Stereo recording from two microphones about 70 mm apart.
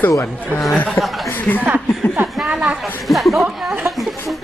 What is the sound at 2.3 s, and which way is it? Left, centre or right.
Speech, centre.